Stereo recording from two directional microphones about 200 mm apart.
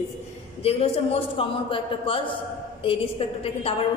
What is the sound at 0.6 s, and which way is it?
A man's voice, 30° left (ahead or behind).